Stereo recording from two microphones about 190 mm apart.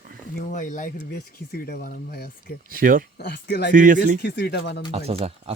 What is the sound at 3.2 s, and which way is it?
Speech, 60° left (ahead or behind).